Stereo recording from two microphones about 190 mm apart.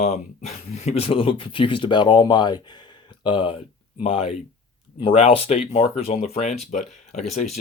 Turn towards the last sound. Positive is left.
turn(degrees=40)  # may be behind; listen again after turning